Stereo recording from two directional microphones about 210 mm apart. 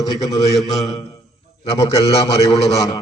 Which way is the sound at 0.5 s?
Centre (ahead or behind).